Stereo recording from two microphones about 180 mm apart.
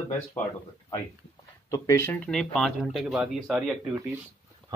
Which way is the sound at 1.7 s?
15° left (ahead or behind).